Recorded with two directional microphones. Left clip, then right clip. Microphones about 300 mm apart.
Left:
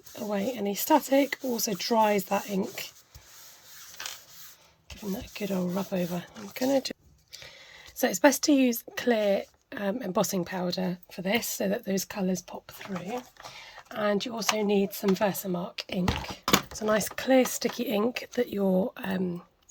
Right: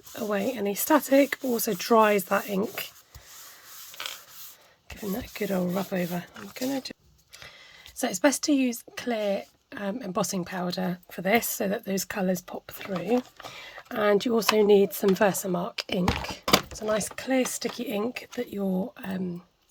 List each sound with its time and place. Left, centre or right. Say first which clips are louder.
0.3 s speech: right 2 dB; centre
4.9 s speech: right 3 dB; centre
7.9 s speech: left 2 dB; centre
12.8 s speech: right 9 dB; right
16.7 s speech: left 1 dB; centre